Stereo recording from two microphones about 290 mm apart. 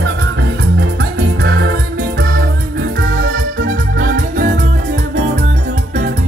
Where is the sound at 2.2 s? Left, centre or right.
Right.